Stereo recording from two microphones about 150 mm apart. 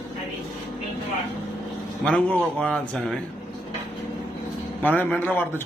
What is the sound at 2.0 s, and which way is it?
Speech, 5° left (ahead or behind).